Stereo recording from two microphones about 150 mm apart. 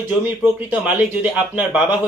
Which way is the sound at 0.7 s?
10° right (ahead or behind).